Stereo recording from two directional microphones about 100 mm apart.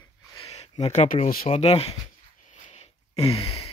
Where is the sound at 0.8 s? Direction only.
90° left.